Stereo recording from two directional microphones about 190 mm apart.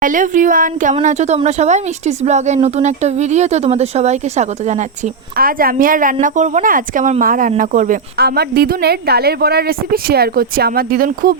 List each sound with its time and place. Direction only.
0.0 s a woman's voice: 45° right (ahead or behind)
5.4 s a woman's voice: 50° right (ahead or behind)